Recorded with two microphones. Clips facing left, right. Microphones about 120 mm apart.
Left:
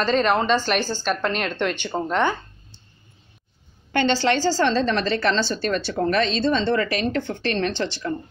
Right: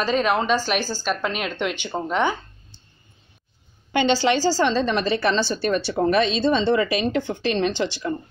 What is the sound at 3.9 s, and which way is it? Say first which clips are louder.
A woman's voice: right 1 dB; 10° right (ahead or behind).